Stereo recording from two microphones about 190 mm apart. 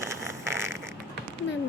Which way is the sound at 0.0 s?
15° right (ahead or behind).